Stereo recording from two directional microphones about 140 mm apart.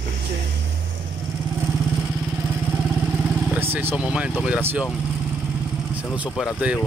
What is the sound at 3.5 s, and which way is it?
Speech, 15° right (ahead or behind).